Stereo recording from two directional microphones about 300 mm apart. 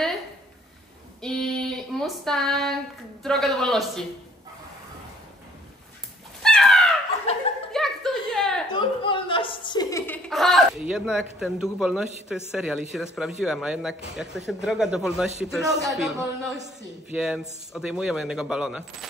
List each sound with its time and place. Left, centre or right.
1.2 s female singing: centre
3.3 s speech: centre
6.4 s dog: centre
7.3 s laughter: centre
7.7 s a sound: centre
8.7 s chuckle: centre
12.4 s speech: centre